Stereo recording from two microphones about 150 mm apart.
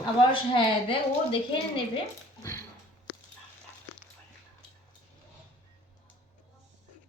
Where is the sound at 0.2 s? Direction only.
35° left (ahead or behind).